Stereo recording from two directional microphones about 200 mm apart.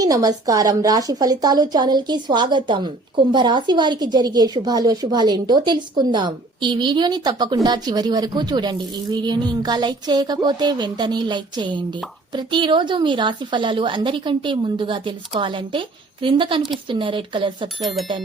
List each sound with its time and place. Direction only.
0.0 s a woman's voice: 20° right (ahead or behind)